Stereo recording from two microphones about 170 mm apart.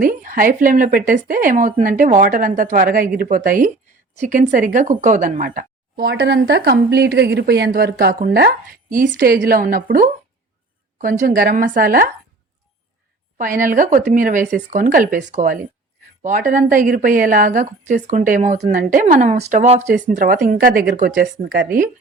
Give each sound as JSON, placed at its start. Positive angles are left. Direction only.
{"t": 0.0, "sound": "speech", "side_deg": -55}
{"t": 6.1, "sound": "speech", "side_deg": -85}
{"t": 13.4, "sound": "speech", "side_deg": -55}
{"t": 19.9, "sound": "speech", "side_deg": -50}